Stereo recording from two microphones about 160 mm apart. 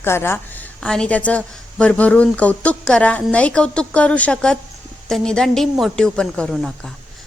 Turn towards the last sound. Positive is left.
turn(degrees=5)  # may be behind; listen again after turning